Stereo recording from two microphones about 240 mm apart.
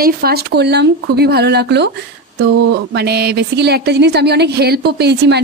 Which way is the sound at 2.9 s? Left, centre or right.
Right.